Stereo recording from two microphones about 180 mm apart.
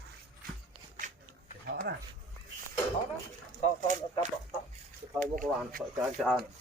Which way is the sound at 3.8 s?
45° right (ahead or behind).